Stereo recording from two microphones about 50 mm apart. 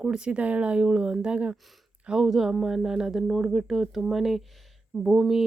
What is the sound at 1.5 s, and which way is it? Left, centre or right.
Speech, centre.